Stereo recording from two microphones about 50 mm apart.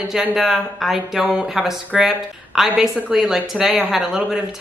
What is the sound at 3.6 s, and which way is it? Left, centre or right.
Speech, right.